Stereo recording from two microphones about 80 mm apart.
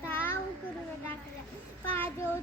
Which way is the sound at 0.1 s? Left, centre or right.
Left.